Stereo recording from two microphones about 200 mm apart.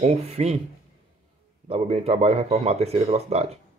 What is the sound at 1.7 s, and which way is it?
Speech, 30° right (ahead or behind).